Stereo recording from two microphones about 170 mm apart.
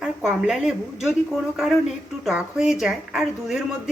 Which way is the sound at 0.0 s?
5° right (ahead or behind).